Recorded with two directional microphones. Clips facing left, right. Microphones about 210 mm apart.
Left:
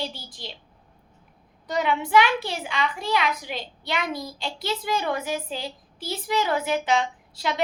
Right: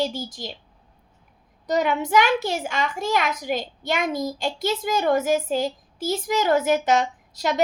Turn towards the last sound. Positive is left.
turn(degrees=-45)  # may be behind; listen again after turning